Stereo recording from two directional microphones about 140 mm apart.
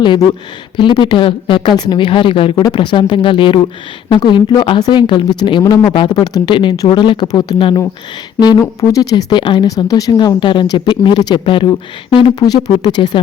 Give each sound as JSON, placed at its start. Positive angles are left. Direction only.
{"t": 0.8, "sound": "speech", "side_deg": 35}
{"t": 8.8, "sound": "speech", "side_deg": 25}